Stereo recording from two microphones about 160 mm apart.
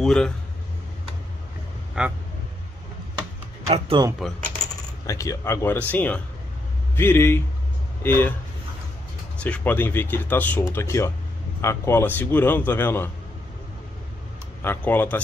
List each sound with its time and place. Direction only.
0.0 s speech: 5° left (ahead or behind)
2.0 s speech: 5° right (ahead or behind)
3.6 s speech: 40° right (ahead or behind)
5.0 s speech: 20° left (ahead or behind)
9.4 s speech: 10° left (ahead or behind)
14.6 s speech: 15° left (ahead or behind)